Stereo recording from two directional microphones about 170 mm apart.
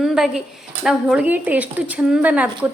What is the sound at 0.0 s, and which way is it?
A woman's voice, centre (ahead or behind).